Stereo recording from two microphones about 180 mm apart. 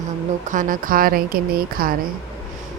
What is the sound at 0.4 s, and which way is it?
Speech, 45° right (ahead or behind).